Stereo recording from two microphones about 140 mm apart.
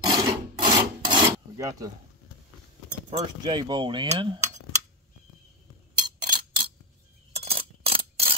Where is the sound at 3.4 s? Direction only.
30° right (ahead or behind).